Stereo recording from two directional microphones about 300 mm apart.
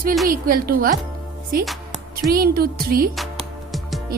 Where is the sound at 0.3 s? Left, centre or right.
Right.